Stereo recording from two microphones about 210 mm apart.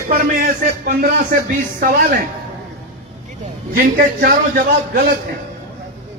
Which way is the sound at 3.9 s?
45° right (ahead or behind).